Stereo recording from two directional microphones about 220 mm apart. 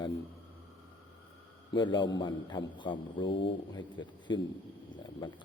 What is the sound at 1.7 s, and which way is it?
A man's voice, 20° left (ahead or behind).